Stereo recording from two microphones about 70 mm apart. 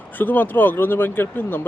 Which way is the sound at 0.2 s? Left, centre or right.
Left.